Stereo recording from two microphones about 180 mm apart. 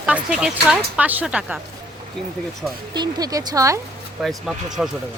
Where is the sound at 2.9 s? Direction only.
25° right (ahead or behind).